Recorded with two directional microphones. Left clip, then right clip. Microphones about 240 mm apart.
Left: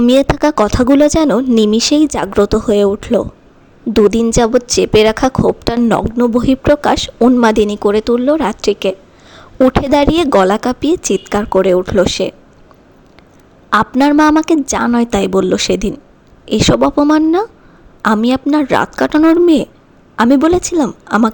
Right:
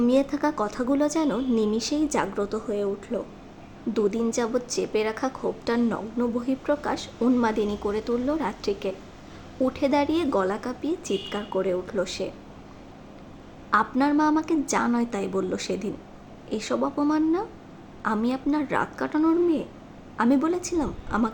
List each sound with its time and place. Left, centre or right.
0.0 s a woman's voice: left
13.9 s a woman's voice: left